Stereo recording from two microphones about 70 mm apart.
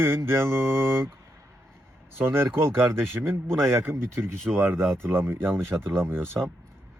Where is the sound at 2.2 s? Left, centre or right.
Right.